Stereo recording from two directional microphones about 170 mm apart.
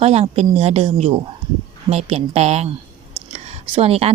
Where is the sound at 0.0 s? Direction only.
40° right (ahead or behind).